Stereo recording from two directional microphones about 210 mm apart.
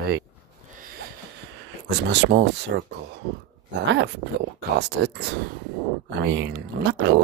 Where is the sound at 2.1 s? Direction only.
55° right (ahead or behind).